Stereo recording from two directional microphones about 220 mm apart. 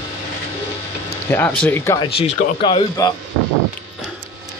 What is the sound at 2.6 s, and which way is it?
Speech, 20° left (ahead or behind).